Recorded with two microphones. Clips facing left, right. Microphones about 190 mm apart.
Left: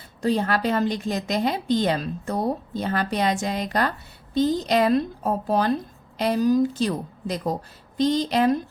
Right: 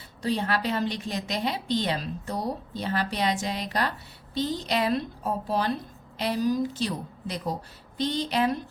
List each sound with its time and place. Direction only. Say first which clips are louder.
0.2 s a woman's voice: left 5 dB; 45° left (ahead or behind)